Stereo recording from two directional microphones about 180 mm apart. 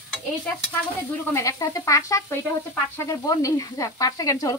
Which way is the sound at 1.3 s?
20° left (ahead or behind).